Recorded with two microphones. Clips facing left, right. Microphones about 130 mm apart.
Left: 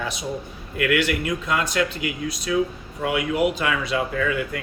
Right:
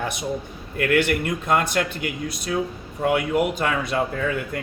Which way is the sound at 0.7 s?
45° right (ahead or behind).